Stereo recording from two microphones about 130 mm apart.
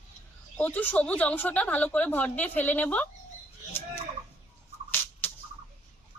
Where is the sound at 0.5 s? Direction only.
10° left (ahead or behind).